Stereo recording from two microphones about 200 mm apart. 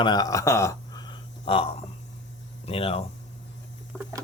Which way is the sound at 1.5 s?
30° left (ahead or behind).